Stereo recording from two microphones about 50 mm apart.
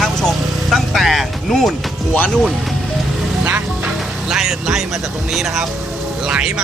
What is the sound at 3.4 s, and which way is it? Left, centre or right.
Music, right.